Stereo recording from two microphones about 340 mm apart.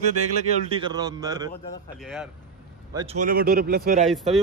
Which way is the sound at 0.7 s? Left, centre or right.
Centre.